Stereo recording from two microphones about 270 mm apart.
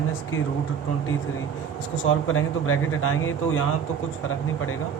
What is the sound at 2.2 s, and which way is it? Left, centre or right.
Speech, left.